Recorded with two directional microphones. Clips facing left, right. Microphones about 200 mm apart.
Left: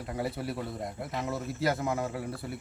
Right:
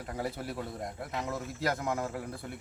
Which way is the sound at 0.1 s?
Centre (ahead or behind).